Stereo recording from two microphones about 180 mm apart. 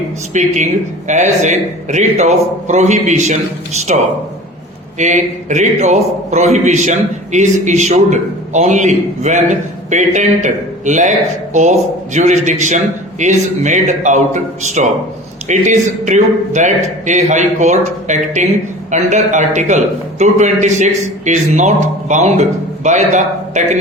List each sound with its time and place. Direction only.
0.3 s a man's voice: 40° right (ahead or behind)
4.9 s a man's voice: 40° right (ahead or behind)